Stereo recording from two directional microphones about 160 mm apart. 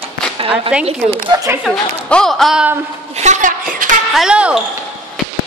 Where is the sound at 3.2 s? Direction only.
50° right (ahead or behind).